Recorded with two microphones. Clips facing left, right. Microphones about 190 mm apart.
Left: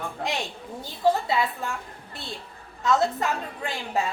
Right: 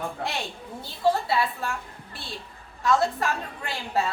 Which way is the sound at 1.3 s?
20° left (ahead or behind).